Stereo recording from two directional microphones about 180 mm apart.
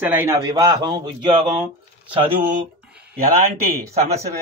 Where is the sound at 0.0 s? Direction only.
10° right (ahead or behind); by 1.4 s 25° right (ahead or behind).